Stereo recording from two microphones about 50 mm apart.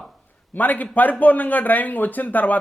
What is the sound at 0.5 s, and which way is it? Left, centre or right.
Speech, left.